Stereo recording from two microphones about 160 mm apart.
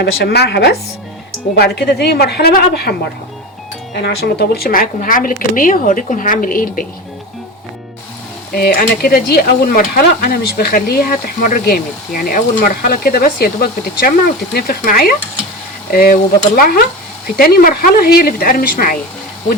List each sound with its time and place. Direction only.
0.0 s a woman's voice: 90° left; by 2.9 s 70° left (ahead or behind)
4.0 s speech: 80° left; by 6.8 s 60° left (ahead or behind)
8.5 s speech: 70° left (ahead or behind)